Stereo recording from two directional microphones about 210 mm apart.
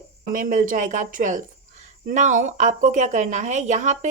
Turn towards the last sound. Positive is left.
turn(degrees=-35)  # may be behind; listen again after turning